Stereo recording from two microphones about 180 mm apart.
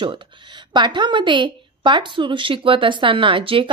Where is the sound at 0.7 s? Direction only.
25° right (ahead or behind).